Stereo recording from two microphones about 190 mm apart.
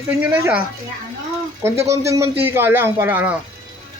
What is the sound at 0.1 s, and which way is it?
Speech, 10° right (ahead or behind).